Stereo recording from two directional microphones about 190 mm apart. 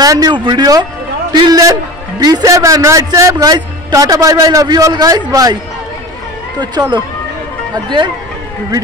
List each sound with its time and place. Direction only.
0.0 s a man's voice: 20° right (ahead or behind)
6.6 s a man's voice: 20° right (ahead or behind)